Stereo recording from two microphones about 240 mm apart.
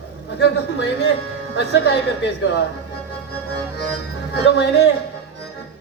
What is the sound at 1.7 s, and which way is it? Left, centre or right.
Music, left.